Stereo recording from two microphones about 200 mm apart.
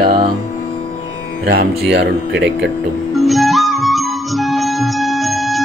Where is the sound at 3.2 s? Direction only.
Centre (ahead or behind).